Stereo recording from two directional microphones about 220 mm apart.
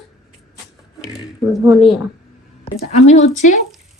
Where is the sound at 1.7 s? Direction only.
Centre (ahead or behind).